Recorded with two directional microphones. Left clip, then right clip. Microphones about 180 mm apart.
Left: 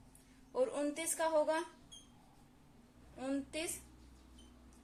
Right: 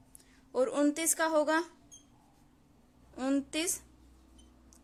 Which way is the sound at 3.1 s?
55° right (ahead or behind).